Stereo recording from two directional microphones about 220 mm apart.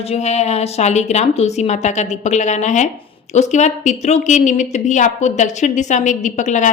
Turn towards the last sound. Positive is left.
turn(degrees=35)  # may be behind; listen again after turning